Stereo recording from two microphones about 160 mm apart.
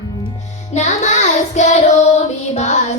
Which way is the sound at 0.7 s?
45° left (ahead or behind).